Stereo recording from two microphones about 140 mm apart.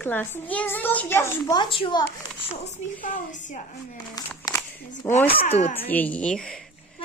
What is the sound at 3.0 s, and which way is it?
Speech, 75° left (ahead or behind).